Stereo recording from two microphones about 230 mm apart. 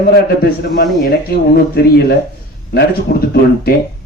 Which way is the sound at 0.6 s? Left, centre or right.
Left.